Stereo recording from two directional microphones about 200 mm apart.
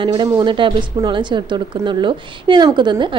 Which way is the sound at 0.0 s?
25° right (ahead or behind).